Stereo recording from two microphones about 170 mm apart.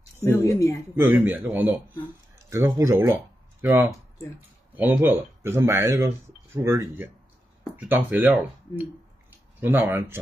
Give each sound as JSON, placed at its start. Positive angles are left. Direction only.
{"t": 0.2, "sound": "speech", "side_deg": 15}
{"t": 0.9, "sound": "speech", "side_deg": -10}